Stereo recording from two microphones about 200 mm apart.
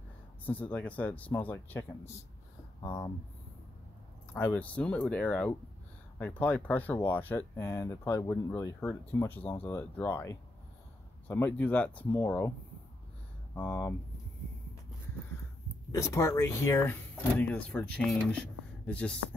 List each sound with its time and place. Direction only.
0.5 s speech: 10° left (ahead or behind)
4.3 s speech: 10° left (ahead or behind)
13.6 s speech: 10° left (ahead or behind)
15.9 s speech: 15° left (ahead or behind)